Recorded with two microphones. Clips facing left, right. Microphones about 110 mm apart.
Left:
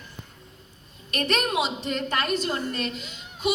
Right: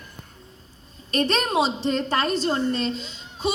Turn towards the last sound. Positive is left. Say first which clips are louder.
# right 1 dB
turn(degrees=-30)  # may be behind; listen again after turning